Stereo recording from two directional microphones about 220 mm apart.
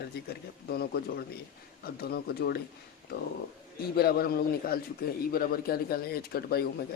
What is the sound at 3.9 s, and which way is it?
Speech, 45° left (ahead or behind).